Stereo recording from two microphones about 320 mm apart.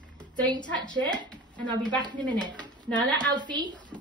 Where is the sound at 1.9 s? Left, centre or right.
Centre.